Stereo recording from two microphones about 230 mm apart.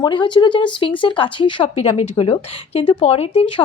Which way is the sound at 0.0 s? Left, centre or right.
Centre.